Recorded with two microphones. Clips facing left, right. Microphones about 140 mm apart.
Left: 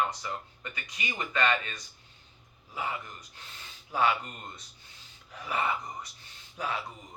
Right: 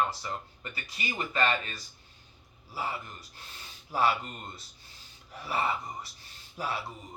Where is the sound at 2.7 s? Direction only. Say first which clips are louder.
Even; 35° right (ahead or behind).